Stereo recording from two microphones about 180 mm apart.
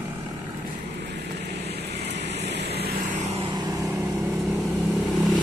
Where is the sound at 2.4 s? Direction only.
70° right (ahead or behind).